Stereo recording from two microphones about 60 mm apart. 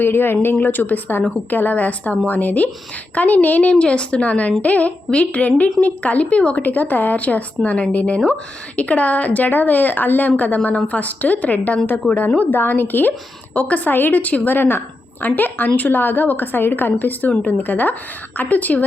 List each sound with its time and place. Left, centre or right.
0.0 s a woman's voice: left